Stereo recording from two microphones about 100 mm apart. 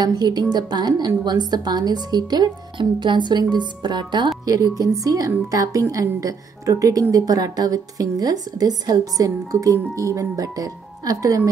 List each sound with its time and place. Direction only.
0.0 s a woman's voice: 40° right (ahead or behind)
4.5 s a woman's voice: 35° right (ahead or behind)